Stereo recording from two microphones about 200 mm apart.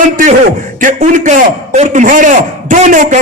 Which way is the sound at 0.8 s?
40° right (ahead or behind).